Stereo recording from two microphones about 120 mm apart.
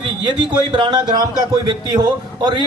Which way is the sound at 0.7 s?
35° right (ahead or behind).